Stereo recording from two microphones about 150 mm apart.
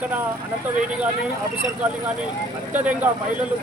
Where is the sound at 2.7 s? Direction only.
10° right (ahead or behind).